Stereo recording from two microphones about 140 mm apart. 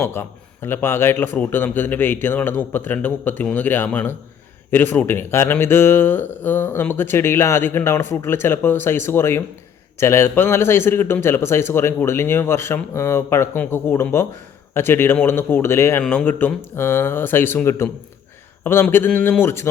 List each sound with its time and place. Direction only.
0.0 s speech: 15° left (ahead or behind)